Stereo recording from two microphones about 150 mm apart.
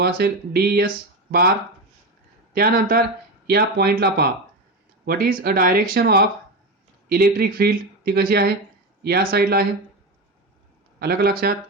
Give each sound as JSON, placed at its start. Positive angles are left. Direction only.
{"t": 0.0, "sound": "speech", "side_deg": -90}
{"t": 2.5, "sound": "speech", "side_deg": -75}
{"t": 5.0, "sound": "speech", "side_deg": -80}
{"t": 7.1, "sound": "speech", "side_deg": -80}
{"t": 11.0, "sound": "speech", "side_deg": -85}